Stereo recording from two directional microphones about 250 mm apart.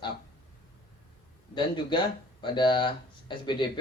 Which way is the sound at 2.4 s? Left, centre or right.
Centre.